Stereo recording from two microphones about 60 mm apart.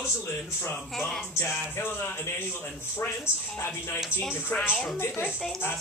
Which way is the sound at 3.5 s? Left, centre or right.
Left.